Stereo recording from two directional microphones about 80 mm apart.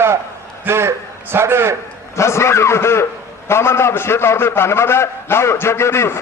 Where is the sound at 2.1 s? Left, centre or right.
Left.